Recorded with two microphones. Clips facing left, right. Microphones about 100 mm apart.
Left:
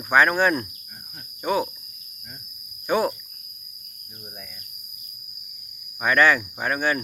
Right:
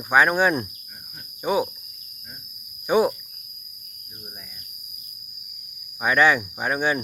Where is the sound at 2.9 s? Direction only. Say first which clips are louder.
Right 3 dB; 15° right (ahead or behind).